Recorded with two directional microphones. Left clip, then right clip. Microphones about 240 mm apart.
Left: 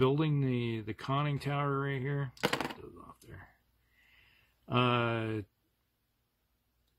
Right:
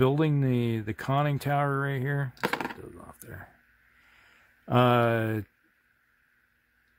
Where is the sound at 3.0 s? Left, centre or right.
Right.